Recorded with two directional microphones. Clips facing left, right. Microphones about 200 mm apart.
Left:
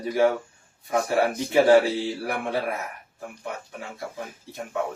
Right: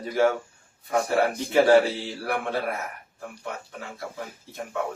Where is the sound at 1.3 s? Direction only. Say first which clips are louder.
Left 1 dB; 15° left (ahead or behind).